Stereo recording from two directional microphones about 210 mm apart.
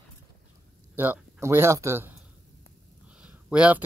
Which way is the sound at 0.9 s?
10° right (ahead or behind).